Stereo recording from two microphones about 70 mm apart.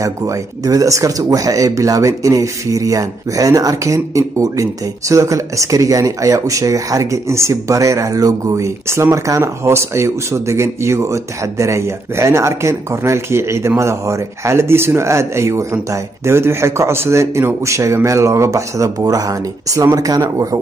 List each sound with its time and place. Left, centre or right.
0.7 s speech: right